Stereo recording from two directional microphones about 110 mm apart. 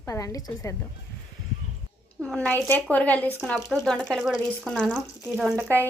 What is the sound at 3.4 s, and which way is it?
Speech, centre (ahead or behind).